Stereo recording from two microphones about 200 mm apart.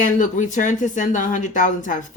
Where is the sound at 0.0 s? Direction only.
40° left (ahead or behind).